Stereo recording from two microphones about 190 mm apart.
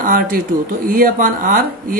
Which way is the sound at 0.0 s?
50° right (ahead or behind).